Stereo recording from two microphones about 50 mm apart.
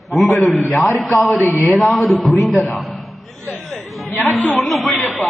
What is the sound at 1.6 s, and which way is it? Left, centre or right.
A man's voice, centre.